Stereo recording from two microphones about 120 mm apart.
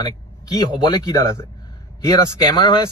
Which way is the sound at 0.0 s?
35° left (ahead or behind).